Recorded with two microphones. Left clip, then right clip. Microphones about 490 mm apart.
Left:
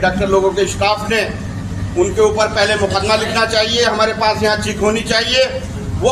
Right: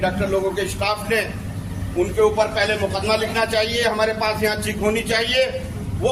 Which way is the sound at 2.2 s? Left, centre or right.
Right.